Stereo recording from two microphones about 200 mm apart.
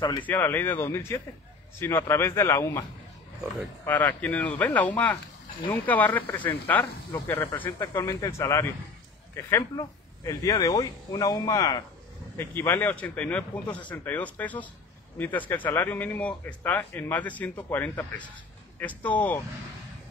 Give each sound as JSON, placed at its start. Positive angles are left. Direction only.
{"t": 0.2, "sound": "speech", "side_deg": 10}
{"t": 3.8, "sound": "speech", "side_deg": 10}